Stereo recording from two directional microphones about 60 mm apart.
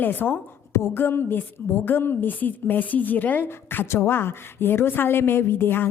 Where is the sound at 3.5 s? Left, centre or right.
Left.